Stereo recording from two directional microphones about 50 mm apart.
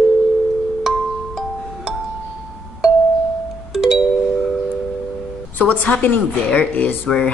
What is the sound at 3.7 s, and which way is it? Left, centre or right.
Music, centre.